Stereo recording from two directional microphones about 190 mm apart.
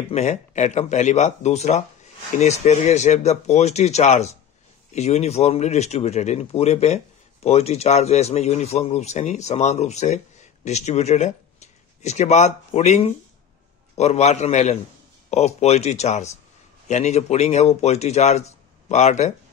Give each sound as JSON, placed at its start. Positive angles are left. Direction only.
{"t": 0.1, "sound": "speech", "side_deg": 35}